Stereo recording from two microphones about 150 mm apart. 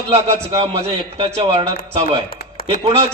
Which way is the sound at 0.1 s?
40° right (ahead or behind).